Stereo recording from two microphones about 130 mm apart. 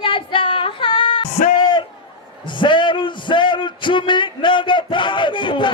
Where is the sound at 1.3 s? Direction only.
60° left (ahead or behind).